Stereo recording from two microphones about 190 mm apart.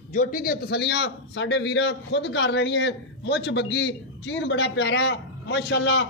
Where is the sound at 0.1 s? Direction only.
45° left (ahead or behind).